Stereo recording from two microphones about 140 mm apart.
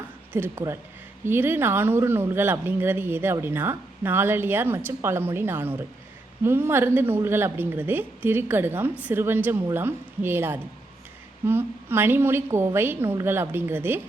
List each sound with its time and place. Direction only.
0.3 s speech: 20° right (ahead or behind)